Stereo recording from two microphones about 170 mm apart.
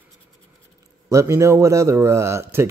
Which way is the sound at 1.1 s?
15° right (ahead or behind).